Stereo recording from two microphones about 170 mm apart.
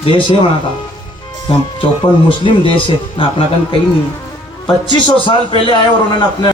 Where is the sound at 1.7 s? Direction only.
30° left (ahead or behind).